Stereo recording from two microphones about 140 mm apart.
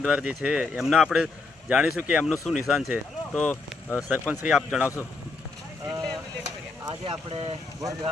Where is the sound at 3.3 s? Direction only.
10° left (ahead or behind).